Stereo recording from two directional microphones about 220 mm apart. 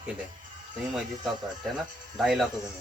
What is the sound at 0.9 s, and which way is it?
Speech, centre (ahead or behind).